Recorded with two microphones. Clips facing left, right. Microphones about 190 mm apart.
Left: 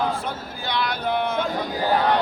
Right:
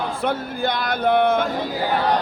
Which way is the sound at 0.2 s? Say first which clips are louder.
Right 8 dB; 60° right (ahead or behind).